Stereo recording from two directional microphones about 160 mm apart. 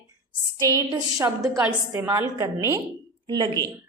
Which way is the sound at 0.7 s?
20° right (ahead or behind).